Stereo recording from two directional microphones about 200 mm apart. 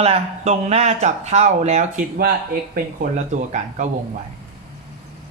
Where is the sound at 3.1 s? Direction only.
35° right (ahead or behind).